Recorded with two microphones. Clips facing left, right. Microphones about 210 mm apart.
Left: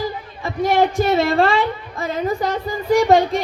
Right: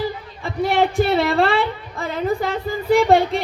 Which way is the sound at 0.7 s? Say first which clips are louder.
Left 1 dB; 45° left (ahead or behind).